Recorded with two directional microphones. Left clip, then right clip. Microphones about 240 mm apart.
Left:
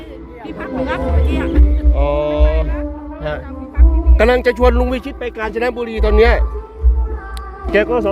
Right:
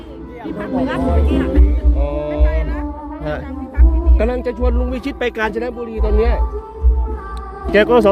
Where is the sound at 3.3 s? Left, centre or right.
Centre.